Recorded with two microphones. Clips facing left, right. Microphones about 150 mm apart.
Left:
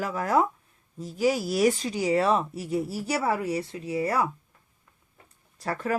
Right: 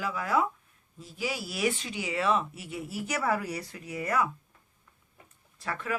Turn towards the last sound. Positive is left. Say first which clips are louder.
# left 5 dB
turn(degrees=40)  # may be behind; listen again after turning